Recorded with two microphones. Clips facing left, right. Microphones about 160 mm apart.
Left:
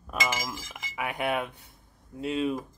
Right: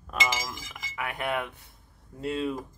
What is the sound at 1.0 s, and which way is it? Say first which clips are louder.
Cutlery: left 2 dB; 15° left (ahead or behind).